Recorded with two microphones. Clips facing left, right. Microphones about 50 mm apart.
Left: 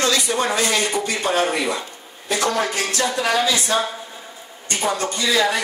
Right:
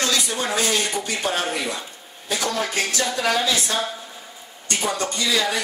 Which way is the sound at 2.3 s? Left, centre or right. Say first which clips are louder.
Left 4 dB; left.